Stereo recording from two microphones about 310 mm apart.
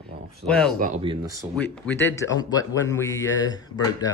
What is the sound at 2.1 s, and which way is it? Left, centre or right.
Speech, centre.